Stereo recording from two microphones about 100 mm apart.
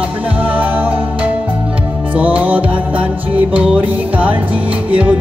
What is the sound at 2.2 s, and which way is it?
Music, 15° right (ahead or behind).